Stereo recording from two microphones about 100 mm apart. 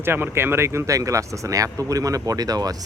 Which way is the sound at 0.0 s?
25° right (ahead or behind).